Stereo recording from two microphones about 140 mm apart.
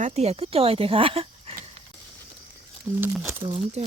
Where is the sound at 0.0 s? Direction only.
50° right (ahead or behind).